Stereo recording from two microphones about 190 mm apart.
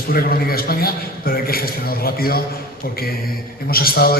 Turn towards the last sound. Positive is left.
turn(degrees=50)  # may be behind; listen again after turning